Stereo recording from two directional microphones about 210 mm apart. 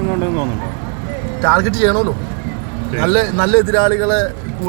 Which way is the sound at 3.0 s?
Centre (ahead or behind).